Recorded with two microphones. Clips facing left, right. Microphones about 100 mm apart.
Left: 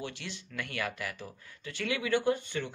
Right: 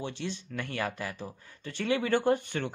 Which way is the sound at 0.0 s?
30° right (ahead or behind).